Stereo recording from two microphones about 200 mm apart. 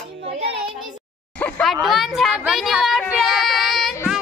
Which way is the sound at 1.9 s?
Centre (ahead or behind).